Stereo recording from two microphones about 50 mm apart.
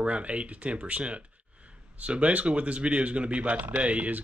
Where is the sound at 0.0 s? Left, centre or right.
Right.